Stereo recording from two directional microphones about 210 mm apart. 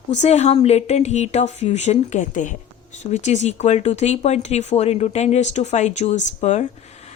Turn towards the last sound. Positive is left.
turn(degrees=35)  # may be behind; listen again after turning